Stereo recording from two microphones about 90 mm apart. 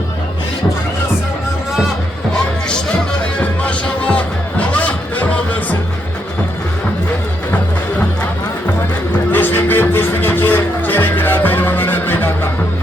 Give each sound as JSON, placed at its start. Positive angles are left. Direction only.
{"t": 3.6, "sound": "music", "side_deg": 15}
{"t": 9.3, "sound": "music", "side_deg": 25}